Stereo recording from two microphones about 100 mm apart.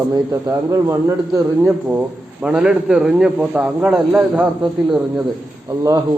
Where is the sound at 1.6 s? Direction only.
15° right (ahead or behind).